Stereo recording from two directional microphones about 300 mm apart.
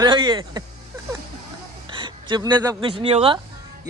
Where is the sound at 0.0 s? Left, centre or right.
Centre.